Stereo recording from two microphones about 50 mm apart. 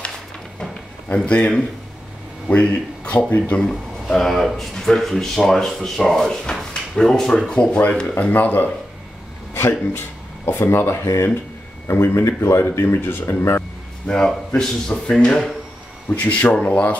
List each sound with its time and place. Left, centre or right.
1.1 s speech: left
2.6 s speech: left
3.3 s speech: left
3.6 s speech: centre
8.2 s speech: left
9.7 s speech: left
13.2 s speech: left
14.0 s speech: centre
16.2 s speech: left